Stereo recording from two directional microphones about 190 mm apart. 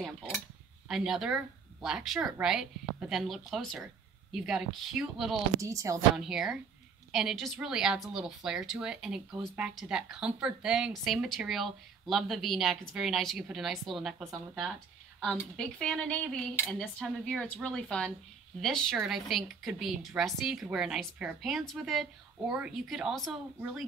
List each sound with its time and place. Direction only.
0.8 s speech: centre (ahead or behind)
5.6 s speech: 15° right (ahead or behind)
6.1 s a woman's voice: 5° right (ahead or behind)